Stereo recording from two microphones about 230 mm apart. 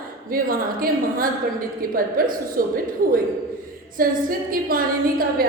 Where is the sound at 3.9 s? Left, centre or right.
Right.